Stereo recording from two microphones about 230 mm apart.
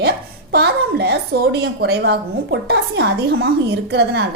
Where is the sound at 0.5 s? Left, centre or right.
Right.